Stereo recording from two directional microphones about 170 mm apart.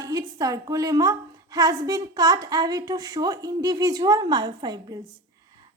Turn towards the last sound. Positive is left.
turn(degrees=-25)  # may be behind; listen again after turning